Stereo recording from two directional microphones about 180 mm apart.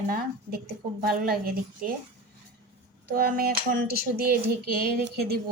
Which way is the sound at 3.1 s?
50° right (ahead or behind).